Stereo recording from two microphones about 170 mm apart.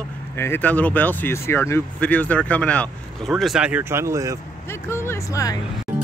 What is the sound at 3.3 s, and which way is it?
Speech, 5° right (ahead or behind).